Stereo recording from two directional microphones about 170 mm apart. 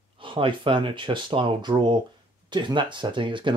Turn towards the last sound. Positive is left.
turn(degrees=-30)  # may be behind; listen again after turning